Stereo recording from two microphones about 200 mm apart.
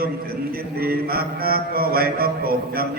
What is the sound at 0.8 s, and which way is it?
Mantra, 50° right (ahead or behind).